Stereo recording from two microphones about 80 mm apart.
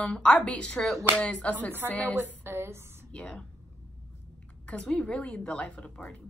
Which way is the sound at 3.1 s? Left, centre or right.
Centre.